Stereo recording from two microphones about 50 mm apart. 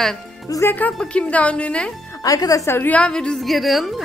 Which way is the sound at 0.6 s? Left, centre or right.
Left.